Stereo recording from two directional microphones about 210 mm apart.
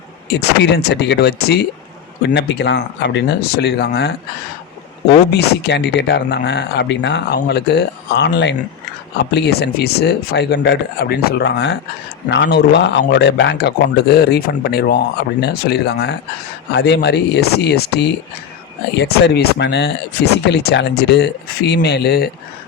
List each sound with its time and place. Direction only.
0.3 s speech: 55° left (ahead or behind)
5.3 s speech: 55° left (ahead or behind)